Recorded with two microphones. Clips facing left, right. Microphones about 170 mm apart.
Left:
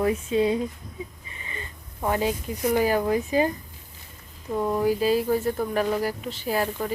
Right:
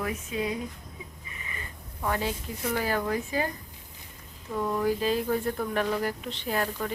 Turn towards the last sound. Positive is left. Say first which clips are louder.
# left 4 dB
turn(degrees=5)  # may be behind; listen again after turning